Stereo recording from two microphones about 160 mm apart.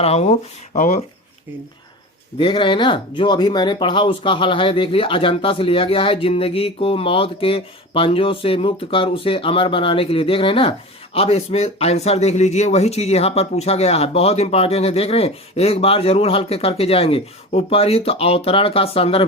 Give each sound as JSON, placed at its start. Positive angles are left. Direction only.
{"t": 0.0, "sound": "speech", "side_deg": 40}
{"t": 2.4, "sound": "speech", "side_deg": 35}